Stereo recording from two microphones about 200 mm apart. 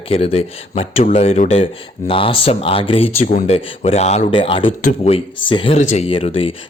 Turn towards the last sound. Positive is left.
turn(degrees=25)  # may be behind; listen again after turning